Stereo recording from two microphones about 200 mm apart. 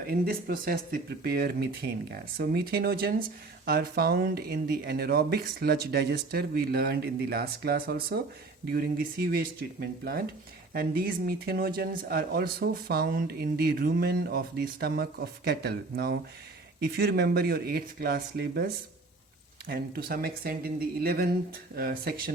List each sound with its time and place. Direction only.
0.1 s speech: 45° right (ahead or behind)